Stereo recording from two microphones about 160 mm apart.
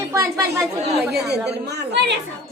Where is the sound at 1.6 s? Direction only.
90° right.